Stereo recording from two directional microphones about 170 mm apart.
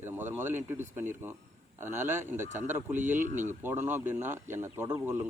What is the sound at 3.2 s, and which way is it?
Speech, 45° right (ahead or behind).